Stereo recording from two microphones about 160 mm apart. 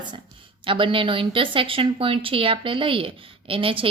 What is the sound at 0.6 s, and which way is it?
A woman's voice, 35° right (ahead or behind).